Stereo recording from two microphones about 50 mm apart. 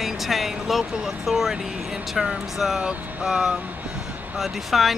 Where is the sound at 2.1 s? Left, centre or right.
Centre.